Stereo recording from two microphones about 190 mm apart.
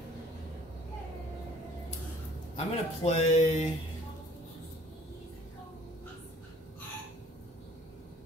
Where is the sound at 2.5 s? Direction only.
35° left (ahead or behind).